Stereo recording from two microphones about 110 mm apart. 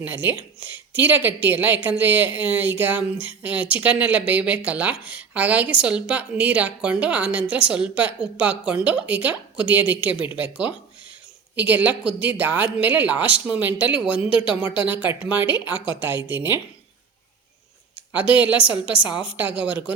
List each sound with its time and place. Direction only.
0.0 s speech: 15° right (ahead or behind)
14.2 s speech: 55° left (ahead or behind)
14.8 s speech: 15° right (ahead or behind)
15.4 s speech: 45° left (ahead or behind)
16.0 s a woman's voice: 15° right (ahead or behind)
17.9 s a sound: 15° right (ahead or behind)
18.3 s speech: 15° right (ahead or behind)